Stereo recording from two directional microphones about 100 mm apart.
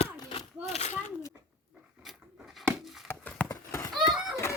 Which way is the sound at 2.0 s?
Centre (ahead or behind).